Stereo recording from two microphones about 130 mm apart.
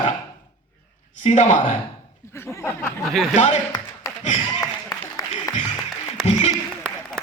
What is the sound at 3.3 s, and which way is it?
Speech, 60° left (ahead or behind).